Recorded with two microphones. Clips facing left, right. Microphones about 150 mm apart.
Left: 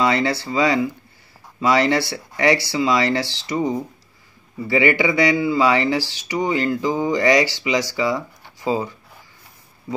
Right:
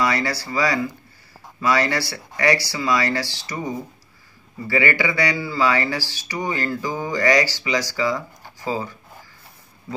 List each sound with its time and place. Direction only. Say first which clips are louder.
0.0 s speech: left 3 dB; 25° left (ahead or behind)